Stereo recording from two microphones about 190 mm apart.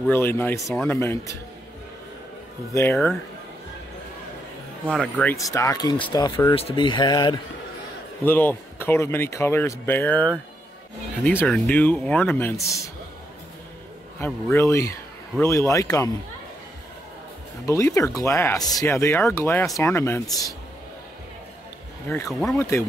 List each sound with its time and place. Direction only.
0.1 s speech: 10° left (ahead or behind)
2.7 s speech: 10° left (ahead or behind)
4.8 s speech: 5° left (ahead or behind); by 7.3 s 20° left (ahead or behind)
8.3 s speech: 10° left (ahead or behind)
14.2 s speech: 15° left (ahead or behind)
17.6 s speech: 15° left (ahead or behind)
22.3 s speech: centre (ahead or behind)
22.6 s speech: 15° left (ahead or behind)